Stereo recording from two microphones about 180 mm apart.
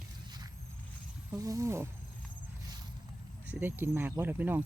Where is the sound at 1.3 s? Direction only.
15° right (ahead or behind).